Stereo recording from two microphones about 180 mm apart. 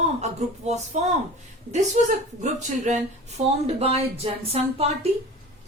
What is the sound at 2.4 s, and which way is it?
Speech, 40° right (ahead or behind).